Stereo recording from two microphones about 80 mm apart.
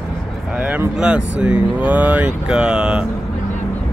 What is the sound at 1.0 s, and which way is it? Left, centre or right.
Speech, centre.